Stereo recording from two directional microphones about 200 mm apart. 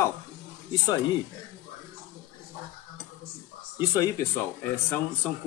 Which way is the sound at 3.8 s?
15° left (ahead or behind).